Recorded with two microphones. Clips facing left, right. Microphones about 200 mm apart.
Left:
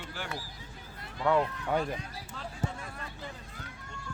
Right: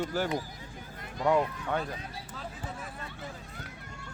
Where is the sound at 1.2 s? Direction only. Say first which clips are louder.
Right 1 dB; 10° right (ahead or behind).